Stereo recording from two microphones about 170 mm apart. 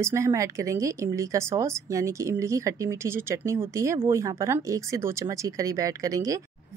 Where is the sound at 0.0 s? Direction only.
15° right (ahead or behind).